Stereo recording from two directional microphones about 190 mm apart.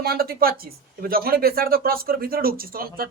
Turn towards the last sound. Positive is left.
turn(degrees=-50)  # may be behind; listen again after turning